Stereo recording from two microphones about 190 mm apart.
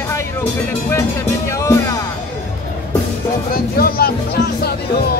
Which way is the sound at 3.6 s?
50° left (ahead or behind).